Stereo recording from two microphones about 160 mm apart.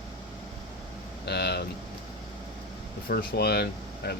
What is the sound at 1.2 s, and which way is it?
Speech, 90° left.